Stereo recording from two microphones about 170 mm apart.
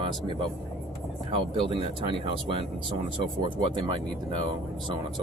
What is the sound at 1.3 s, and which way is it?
Speech, 30° right (ahead or behind).